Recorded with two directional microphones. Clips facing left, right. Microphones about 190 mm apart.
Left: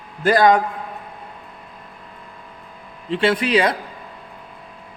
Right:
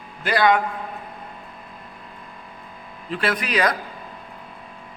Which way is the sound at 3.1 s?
25° left (ahead or behind).